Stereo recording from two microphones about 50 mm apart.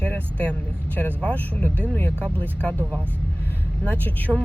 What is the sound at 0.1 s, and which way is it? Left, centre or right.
Speech, left.